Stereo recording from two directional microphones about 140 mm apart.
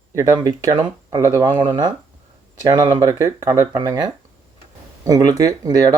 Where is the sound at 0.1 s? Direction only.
25° right (ahead or behind).